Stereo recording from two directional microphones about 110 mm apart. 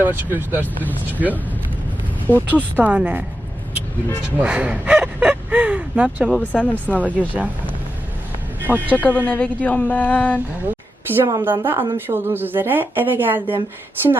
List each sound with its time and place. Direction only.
0.0 s speech: 20° right (ahead or behind)
4.4 s speech: 15° right (ahead or behind)
6.4 s speech: 15° left (ahead or behind)
8.6 s speech: 15° right (ahead or behind)
9.0 s speech: 15° left (ahead or behind)
10.7 s a sound: 20° right (ahead or behind)
11.4 s speech: 20° right (ahead or behind)